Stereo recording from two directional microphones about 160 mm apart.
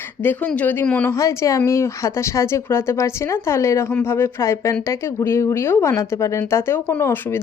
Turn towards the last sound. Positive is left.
turn(degrees=15)  # may be behind; listen again after turning